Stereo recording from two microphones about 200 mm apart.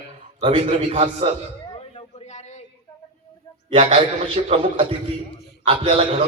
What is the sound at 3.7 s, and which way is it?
A man's voice, 25° right (ahead or behind).